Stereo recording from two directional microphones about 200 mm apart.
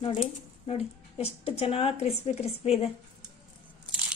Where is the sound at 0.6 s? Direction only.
30° left (ahead or behind).